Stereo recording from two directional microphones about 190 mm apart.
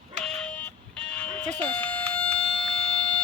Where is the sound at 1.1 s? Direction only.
5° left (ahead or behind).